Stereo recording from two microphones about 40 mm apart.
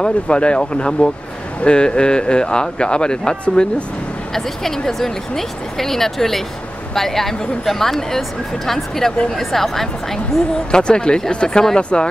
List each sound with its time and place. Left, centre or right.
0.0 s speech: left
4.3 s a woman's voice: centre
10.7 s speech: left